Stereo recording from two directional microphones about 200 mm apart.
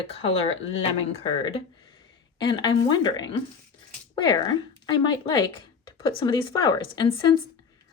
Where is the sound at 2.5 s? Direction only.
20° left (ahead or behind).